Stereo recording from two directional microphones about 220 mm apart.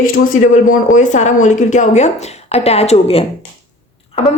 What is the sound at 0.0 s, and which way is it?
Speech, 40° left (ahead or behind).